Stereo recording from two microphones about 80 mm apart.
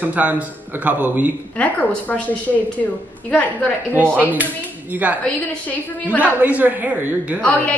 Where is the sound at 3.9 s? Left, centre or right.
Right.